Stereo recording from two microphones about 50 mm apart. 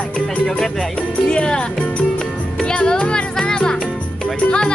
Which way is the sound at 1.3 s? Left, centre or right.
Left.